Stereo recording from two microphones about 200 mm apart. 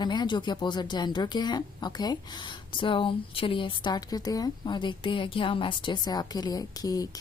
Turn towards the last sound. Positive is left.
turn(degrees=20)  # may be behind; listen again after turning